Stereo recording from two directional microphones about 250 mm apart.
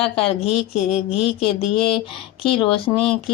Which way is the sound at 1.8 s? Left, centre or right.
Centre.